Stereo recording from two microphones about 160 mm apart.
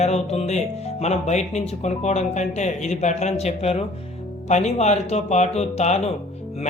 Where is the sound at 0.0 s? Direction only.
40° left (ahead or behind).